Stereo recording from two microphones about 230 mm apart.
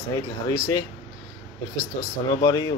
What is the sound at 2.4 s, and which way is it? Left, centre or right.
Speech, centre.